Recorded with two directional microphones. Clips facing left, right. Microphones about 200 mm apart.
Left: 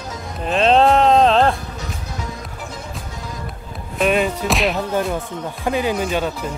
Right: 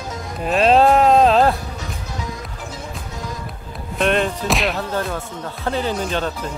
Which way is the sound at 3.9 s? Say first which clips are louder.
Left 1 dB; 5° left (ahead or behind).